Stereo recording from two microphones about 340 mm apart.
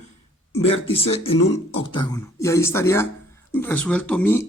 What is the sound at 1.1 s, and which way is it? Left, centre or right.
Speech, centre.